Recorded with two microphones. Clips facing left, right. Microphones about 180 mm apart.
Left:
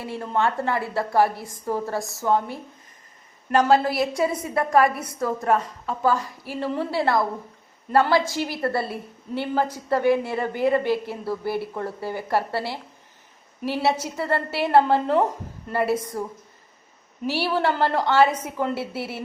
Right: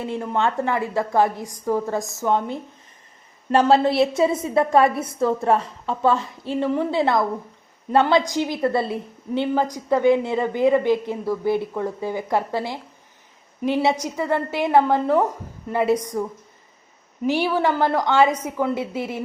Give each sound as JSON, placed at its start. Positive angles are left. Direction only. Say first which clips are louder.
{"t": 0.0, "sound": "a woman's voice", "louder": "right 2 dB", "side_deg": -15}
{"t": 17.2, "sound": "a woman's voice", "louder": "right 3 dB", "side_deg": -15}